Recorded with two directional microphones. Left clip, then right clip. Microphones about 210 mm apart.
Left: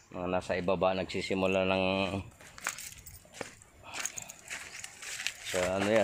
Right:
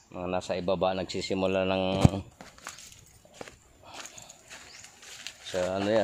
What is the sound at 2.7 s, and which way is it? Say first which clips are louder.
Crushing: left 6 dB; 45° left (ahead or behind).